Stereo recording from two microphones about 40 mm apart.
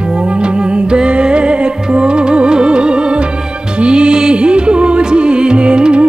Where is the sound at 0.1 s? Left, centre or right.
Right.